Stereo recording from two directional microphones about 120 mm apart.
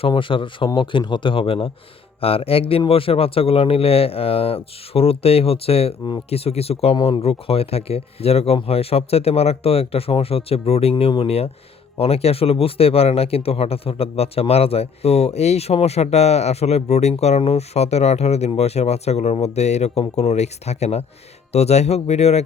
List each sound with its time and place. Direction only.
0.0 s a man's voice: 45° left (ahead or behind)
6.9 s speech: 40° left (ahead or behind)
7.2 s speech: 55° left (ahead or behind)